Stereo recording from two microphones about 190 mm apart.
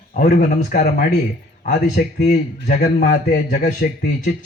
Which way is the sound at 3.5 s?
55° left (ahead or behind).